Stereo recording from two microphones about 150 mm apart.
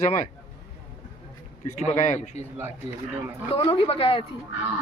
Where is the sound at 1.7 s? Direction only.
50° left (ahead or behind).